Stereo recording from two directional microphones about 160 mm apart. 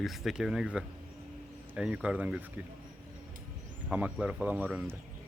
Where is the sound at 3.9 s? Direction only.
5° right (ahead or behind).